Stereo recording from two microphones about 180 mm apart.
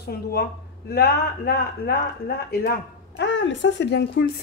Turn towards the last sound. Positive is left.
turn(degrees=65)  # may be behind; listen again after turning